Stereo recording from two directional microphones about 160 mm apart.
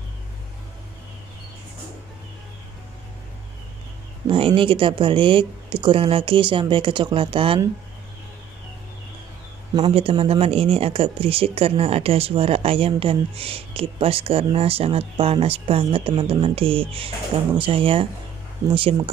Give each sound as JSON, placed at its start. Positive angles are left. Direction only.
{"t": 4.3, "sound": "speech", "side_deg": -35}
{"t": 9.8, "sound": "speech", "side_deg": -35}